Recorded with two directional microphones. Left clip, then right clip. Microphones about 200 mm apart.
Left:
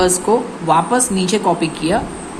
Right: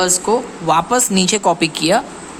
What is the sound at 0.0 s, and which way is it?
Speech, 20° right (ahead or behind).